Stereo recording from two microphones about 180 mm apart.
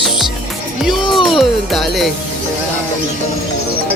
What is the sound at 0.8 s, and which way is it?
Speech, centre (ahead or behind).